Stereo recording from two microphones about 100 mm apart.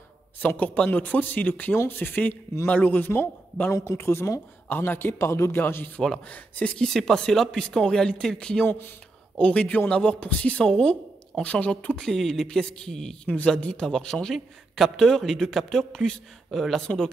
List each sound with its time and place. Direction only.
0.4 s speech: 15° left (ahead or behind)
3.7 s speech: 30° left (ahead or behind)
6.9 s speech: 5° left (ahead or behind)
8.6 s speech: 25° left (ahead or behind)